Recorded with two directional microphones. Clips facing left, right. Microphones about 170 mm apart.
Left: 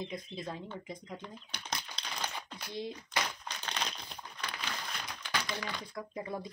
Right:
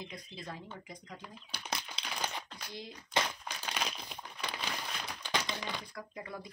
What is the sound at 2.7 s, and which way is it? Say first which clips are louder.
Speech: left 8 dB; 25° left (ahead or behind).